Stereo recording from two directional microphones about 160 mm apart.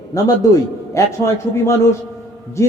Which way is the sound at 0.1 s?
20° left (ahead or behind).